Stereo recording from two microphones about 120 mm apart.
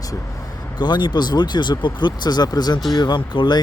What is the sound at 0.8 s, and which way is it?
Speech, 40° left (ahead or behind).